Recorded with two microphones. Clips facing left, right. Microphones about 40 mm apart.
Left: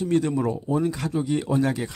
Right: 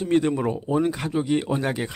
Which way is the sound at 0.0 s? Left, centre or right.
Right.